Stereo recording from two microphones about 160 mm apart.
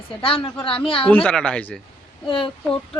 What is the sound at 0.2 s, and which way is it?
Speech, 35° left (ahead or behind).